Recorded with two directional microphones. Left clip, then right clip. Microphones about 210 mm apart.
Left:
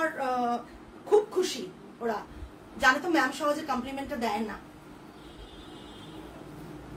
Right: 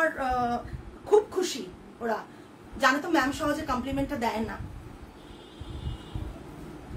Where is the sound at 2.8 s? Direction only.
15° right (ahead or behind).